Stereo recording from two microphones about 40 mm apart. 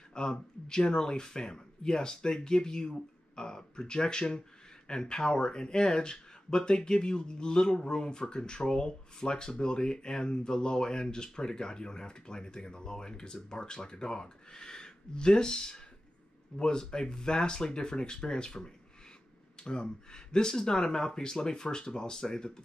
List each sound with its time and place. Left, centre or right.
0.1 s speech: centre